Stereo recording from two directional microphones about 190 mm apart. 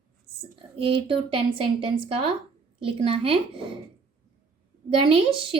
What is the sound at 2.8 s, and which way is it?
Speech, 30° right (ahead or behind).